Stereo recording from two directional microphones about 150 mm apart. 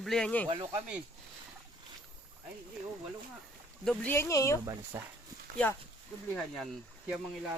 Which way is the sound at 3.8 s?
10° left (ahead or behind).